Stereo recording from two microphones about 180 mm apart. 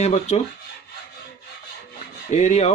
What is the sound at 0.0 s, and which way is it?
Speech, 40° left (ahead or behind).